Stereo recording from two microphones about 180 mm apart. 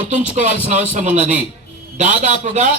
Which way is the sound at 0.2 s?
40° right (ahead or behind).